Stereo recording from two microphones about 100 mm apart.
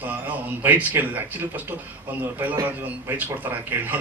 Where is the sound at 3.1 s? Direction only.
20° right (ahead or behind).